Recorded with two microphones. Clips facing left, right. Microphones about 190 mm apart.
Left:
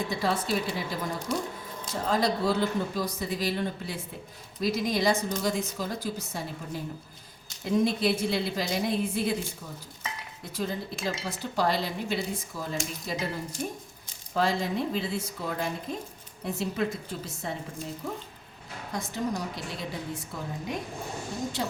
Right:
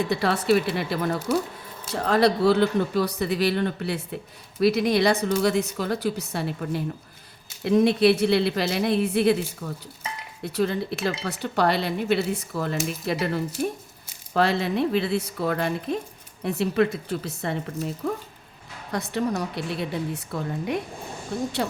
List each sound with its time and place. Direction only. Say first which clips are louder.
0.1 s a woman's voice: right 8 dB; 70° right (ahead or behind)